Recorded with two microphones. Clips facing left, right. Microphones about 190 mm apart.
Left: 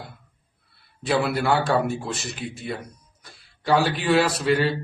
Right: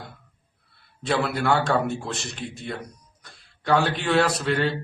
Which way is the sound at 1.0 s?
5° left (ahead or behind).